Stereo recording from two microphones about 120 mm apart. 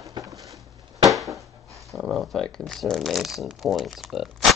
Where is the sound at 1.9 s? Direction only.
5° right (ahead or behind).